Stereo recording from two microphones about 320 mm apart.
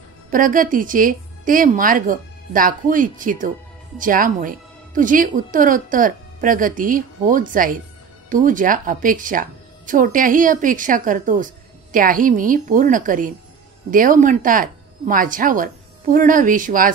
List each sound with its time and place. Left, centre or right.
0.3 s speech: right